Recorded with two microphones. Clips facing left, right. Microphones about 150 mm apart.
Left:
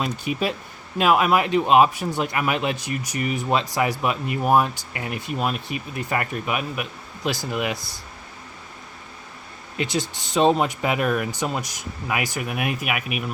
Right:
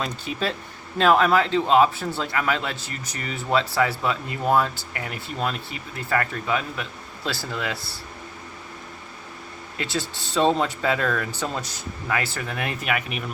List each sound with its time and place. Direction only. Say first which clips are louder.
0.0 s speech: left 3 dB; 15° left (ahead or behind)
9.7 s speech: left 3 dB; 15° left (ahead or behind)